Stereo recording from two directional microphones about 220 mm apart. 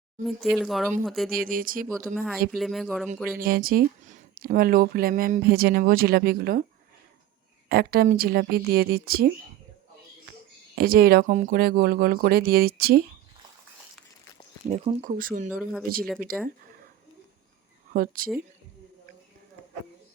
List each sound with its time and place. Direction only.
0.3 s speech: centre (ahead or behind)
1.3 s speech: 40° right (ahead or behind)
2.1 s speech: centre (ahead or behind)
3.3 s speech: 40° right (ahead or behind)
7.7 s speech: 45° right (ahead or behind)
10.8 s speech: 45° right (ahead or behind)
14.7 s speech: 35° right (ahead or behind)
15.4 s speech: centre (ahead or behind)
17.9 s speech: 40° right (ahead or behind)